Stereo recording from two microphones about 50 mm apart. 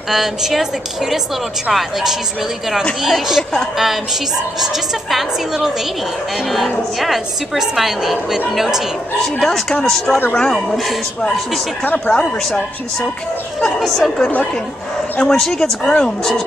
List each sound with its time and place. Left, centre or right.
0.1 s a woman's voice: centre
1.7 s a woman's voice: centre
7.0 s a woman's voice: centre
9.2 s speech: centre
10.0 s speech: left
10.3 s speech: centre
10.8 s a woman's voice: centre
12.1 s a woman's voice: centre
15.1 s speech: centre